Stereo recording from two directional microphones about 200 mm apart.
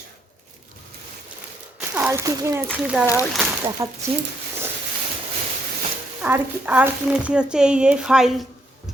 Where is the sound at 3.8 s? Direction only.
15° right (ahead or behind).